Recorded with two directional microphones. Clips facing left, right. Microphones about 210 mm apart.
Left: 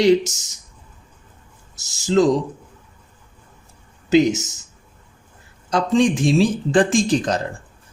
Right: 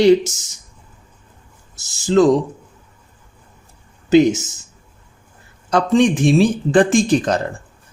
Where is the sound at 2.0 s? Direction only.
55° right (ahead or behind).